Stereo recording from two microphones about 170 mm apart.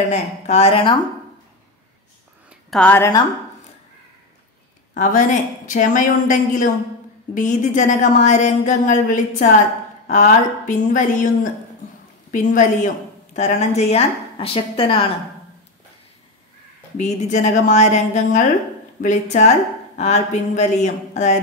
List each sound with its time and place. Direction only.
0.1 s speech: 40° left (ahead or behind)
2.7 s a woman's voice: 10° left (ahead or behind)
4.9 s a woman's voice: 50° left (ahead or behind); by 15.0 s 30° left (ahead or behind)
16.9 s a woman's voice: 45° left (ahead or behind)